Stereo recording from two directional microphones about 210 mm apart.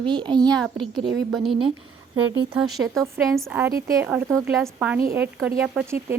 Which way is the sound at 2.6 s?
Centre (ahead or behind).